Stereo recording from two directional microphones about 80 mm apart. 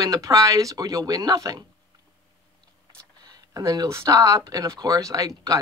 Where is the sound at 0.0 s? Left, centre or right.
Right.